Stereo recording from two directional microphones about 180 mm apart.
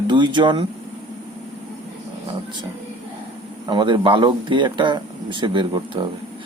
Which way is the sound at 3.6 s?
25° right (ahead or behind).